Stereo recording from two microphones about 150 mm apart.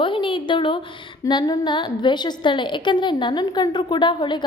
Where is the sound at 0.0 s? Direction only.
35° left (ahead or behind).